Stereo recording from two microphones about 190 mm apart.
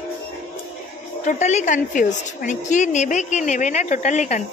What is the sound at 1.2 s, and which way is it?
A woman's voice, 40° left (ahead or behind).